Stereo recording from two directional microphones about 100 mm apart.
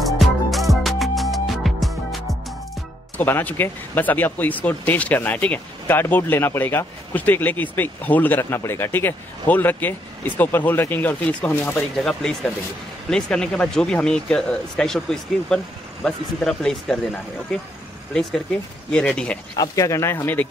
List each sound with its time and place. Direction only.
0.0 s music: centre (ahead or behind)
3.2 s speech: 20° left (ahead or behind)
12.0 s speech: 5° left (ahead or behind)
18.9 s speech: 10° left (ahead or behind)
19.5 s speech: 40° left (ahead or behind); by 20.4 s 20° left (ahead or behind)